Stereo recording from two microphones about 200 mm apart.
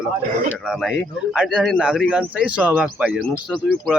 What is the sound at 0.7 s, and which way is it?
A man's voice, centre (ahead or behind).